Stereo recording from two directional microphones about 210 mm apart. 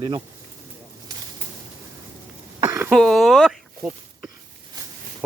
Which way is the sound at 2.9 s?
Centre (ahead or behind).